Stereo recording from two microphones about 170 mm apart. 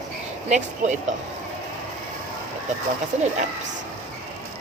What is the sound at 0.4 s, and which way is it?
Speech, 45° right (ahead or behind).